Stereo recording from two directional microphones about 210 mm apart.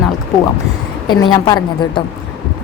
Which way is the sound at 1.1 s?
20° left (ahead or behind).